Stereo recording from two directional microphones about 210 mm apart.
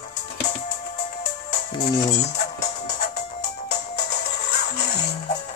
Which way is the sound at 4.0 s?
50° left (ahead or behind).